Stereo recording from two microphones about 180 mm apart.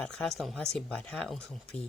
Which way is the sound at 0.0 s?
5° left (ahead or behind).